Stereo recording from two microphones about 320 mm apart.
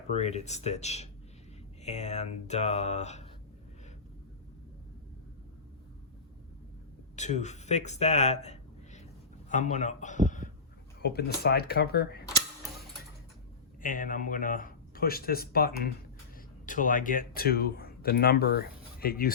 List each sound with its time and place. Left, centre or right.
0.1 s speech: centre
7.2 s a man's voice: left
13.8 s speech: left